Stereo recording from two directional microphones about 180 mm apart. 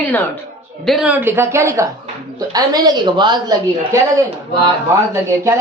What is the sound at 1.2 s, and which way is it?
A woman's voice, 15° right (ahead or behind).